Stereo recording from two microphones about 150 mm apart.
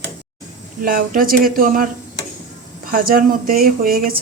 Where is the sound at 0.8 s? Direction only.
65° right (ahead or behind).